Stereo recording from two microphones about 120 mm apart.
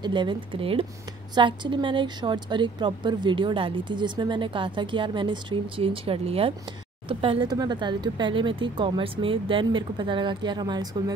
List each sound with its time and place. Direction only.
0.0 s a woman's voice: 40° right (ahead or behind)